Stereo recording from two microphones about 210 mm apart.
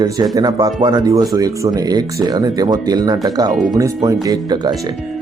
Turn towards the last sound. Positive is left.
turn(degrees=-20)  # may be behind; listen again after turning